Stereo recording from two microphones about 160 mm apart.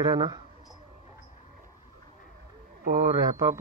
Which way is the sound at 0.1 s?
25° right (ahead or behind).